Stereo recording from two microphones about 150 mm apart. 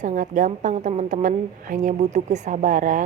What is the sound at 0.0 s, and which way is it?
A woman's voice, 60° right (ahead or behind).